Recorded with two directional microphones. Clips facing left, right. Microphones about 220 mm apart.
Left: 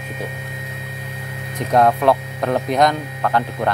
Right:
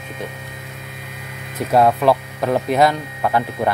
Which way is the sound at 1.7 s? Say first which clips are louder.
Even; 5° right (ahead or behind).